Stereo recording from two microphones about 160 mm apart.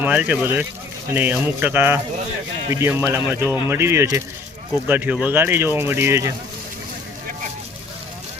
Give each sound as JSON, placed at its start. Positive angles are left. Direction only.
{"t": 0.0, "sound": "speech", "side_deg": -10}